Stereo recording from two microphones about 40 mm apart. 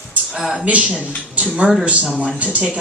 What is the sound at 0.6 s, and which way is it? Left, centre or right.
Speech, right.